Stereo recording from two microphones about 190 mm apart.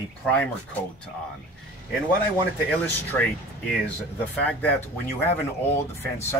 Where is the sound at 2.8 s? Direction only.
10° left (ahead or behind).